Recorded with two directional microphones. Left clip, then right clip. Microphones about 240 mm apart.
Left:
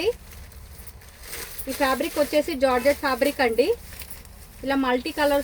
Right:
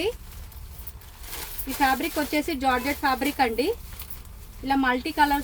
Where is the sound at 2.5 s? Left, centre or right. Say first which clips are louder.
Left 4 dB; centre.